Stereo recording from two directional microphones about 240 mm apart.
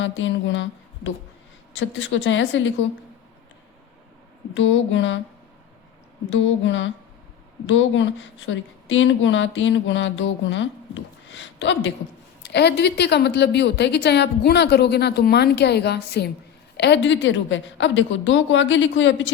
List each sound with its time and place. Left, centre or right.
0.0 s a woman's voice: left
4.5 s a woman's voice: left
6.3 s a woman's voice: left